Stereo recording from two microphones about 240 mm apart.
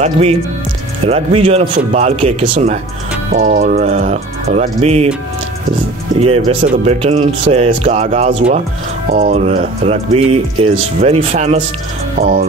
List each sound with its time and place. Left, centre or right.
0.0 s speech: right
6.1 s speech: right
12.2 s speech: right